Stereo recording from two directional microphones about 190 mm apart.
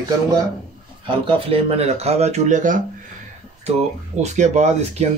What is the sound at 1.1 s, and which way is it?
Speech, 30° right (ahead or behind).